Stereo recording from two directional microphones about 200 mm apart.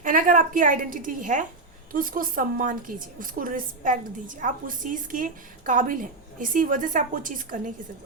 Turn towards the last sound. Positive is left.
turn(degrees=-40)  # may be behind; listen again after turning